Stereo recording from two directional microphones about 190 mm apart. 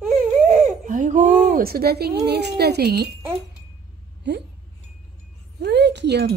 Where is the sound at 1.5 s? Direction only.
50° right (ahead or behind).